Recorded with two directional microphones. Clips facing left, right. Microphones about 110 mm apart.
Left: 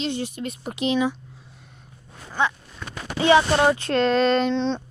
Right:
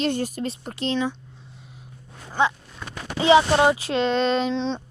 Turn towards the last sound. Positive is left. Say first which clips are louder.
# left 2 dB
turn(degrees=0)  # may be behind; listen again after turning